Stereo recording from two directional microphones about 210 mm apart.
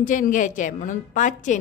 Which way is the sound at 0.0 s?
40° left (ahead or behind).